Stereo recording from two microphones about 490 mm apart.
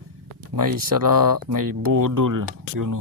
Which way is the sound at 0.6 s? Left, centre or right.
Right.